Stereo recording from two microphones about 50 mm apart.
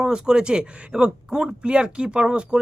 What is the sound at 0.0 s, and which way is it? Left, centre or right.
Speech, centre.